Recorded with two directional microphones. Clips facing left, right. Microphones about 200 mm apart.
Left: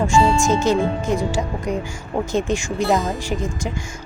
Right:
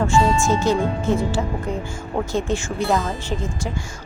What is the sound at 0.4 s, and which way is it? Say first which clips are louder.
Speech: left 1 dB; 20° left (ahead or behind).